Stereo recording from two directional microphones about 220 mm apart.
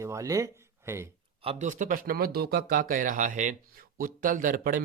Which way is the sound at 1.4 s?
30° right (ahead or behind).